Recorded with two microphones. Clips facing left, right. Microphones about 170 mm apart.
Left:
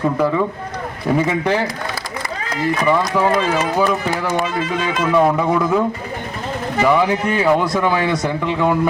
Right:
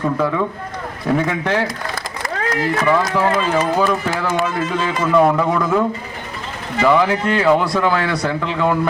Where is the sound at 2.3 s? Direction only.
90° right.